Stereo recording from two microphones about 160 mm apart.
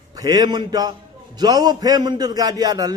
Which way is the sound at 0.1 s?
25° right (ahead or behind).